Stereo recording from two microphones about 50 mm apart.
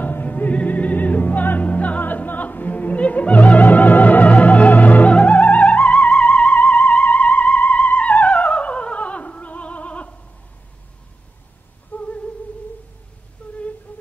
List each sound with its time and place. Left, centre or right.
0.0 s music: left
11.9 s humming: left
13.4 s humming: left